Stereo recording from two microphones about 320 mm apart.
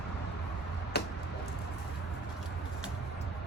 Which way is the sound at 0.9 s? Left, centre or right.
Left.